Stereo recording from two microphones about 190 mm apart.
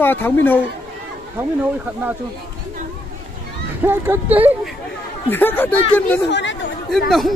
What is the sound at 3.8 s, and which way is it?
Speech, 10° right (ahead or behind).